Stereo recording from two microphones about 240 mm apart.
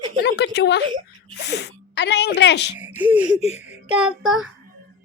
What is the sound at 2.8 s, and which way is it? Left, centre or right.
Speech, centre.